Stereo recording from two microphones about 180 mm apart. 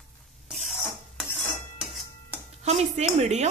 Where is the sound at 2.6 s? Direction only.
35° right (ahead or behind).